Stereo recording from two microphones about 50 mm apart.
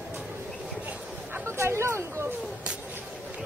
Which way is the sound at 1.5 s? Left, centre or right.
Right.